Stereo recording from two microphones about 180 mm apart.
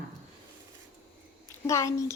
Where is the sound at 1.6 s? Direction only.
15° left (ahead or behind).